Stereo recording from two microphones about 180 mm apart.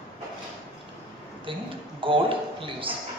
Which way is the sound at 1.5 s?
30° right (ahead or behind).